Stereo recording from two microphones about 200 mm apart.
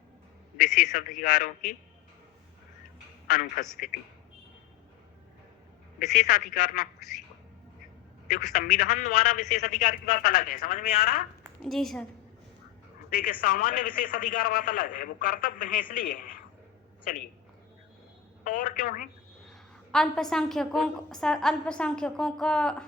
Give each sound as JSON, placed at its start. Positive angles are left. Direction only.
{"t": 0.6, "sound": "a man's voice", "side_deg": 45}
{"t": 3.2, "sound": "a man's voice", "side_deg": 45}
{"t": 6.1, "sound": "a man's voice", "side_deg": 45}
{"t": 8.5, "sound": "a man's voice", "side_deg": 45}
{"t": 11.6, "sound": "a woman's voice", "side_deg": 0}
{"t": 13.1, "sound": "a man's voice", "side_deg": 45}
{"t": 18.4, "sound": "a man's voice", "side_deg": 45}
{"t": 19.5, "sound": "a woman's voice", "side_deg": 0}